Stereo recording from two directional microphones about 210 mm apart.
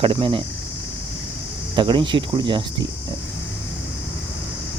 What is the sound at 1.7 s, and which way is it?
Speech, 25° right (ahead or behind).